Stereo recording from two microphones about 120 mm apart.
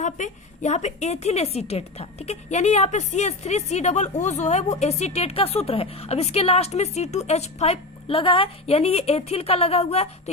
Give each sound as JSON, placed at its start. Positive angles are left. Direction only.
{"t": 0.0, "sound": "a woman's voice", "side_deg": 85}